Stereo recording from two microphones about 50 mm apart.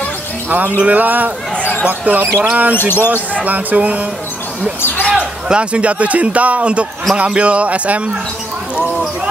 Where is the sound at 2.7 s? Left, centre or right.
Left.